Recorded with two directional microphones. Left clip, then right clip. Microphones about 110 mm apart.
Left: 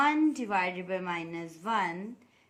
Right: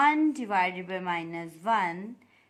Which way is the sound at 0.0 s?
40° right (ahead or behind).